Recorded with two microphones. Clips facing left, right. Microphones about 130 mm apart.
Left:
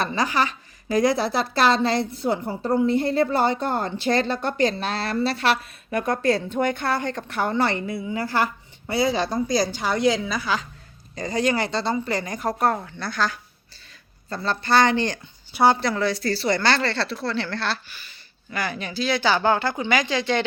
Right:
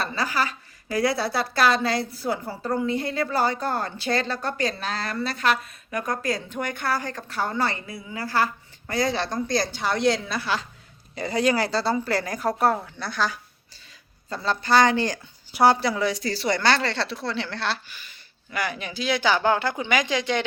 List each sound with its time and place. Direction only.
0.1 s speech: 25° left (ahead or behind)
8.9 s a woman's voice: 5° left (ahead or behind)
11.9 s a woman's voice: 15° left (ahead or behind)
12.2 s a woman's voice: centre (ahead or behind)